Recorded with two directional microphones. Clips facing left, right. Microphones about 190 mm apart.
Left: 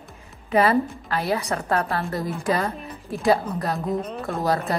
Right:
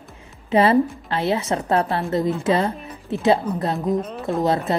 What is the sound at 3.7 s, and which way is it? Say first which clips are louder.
Speech: right 3 dB; centre (ahead or behind).